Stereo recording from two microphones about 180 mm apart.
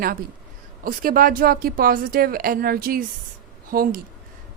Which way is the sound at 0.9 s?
50° right (ahead or behind).